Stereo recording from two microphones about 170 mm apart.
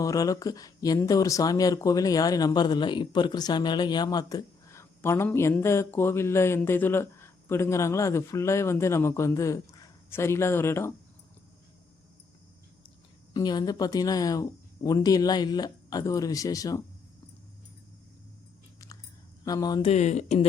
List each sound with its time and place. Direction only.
0.0 s speech: 20° left (ahead or behind)
13.3 s speech: 25° left (ahead or behind)
19.5 s speech: 20° left (ahead or behind)
19.9 s speech: 45° left (ahead or behind)